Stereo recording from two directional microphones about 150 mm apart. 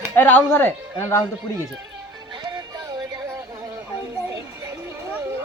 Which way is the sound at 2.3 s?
30° right (ahead or behind).